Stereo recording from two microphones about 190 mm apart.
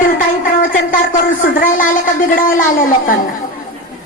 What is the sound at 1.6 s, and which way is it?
A woman's voice, 45° left (ahead or behind).